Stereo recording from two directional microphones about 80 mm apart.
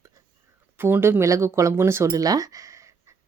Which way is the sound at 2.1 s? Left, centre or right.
Right.